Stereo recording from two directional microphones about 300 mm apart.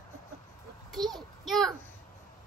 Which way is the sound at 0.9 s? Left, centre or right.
Centre.